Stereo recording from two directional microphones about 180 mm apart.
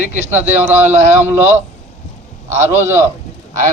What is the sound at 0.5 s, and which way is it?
A man's voice, 10° right (ahead or behind).